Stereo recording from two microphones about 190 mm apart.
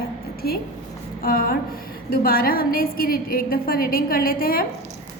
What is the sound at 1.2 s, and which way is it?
A woman's voice, 50° left (ahead or behind).